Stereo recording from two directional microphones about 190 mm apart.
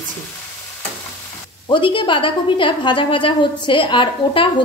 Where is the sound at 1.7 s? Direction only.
25° left (ahead or behind).